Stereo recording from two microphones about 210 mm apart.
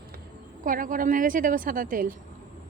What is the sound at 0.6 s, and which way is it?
A woman's voice, 40° right (ahead or behind).